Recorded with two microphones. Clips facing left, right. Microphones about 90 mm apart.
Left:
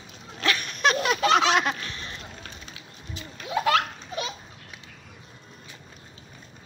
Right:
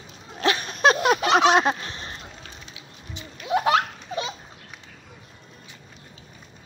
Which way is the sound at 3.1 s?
20° right (ahead or behind).